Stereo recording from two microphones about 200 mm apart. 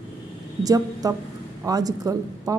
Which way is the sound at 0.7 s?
20° right (ahead or behind).